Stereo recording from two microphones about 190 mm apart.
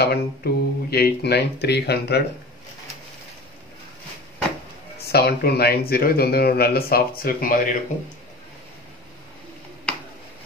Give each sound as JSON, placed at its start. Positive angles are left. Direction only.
{"t": 0.0, "sound": "speech", "side_deg": 60}
{"t": 5.0, "sound": "a man's voice", "side_deg": 55}